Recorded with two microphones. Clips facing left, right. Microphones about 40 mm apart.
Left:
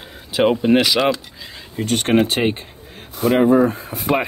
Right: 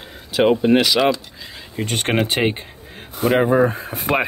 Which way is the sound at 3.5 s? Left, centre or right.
Right.